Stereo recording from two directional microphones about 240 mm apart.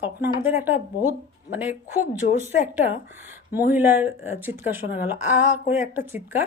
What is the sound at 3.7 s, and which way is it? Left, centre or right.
Speech, centre.